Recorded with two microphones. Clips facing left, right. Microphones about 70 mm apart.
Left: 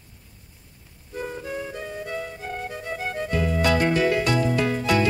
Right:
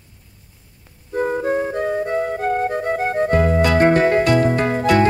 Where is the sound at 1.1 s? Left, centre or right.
Right.